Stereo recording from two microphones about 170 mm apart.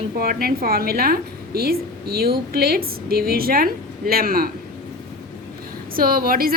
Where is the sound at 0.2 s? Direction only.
60° right (ahead or behind).